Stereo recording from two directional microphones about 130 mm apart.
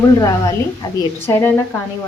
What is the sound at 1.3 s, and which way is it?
Speech, 15° left (ahead or behind).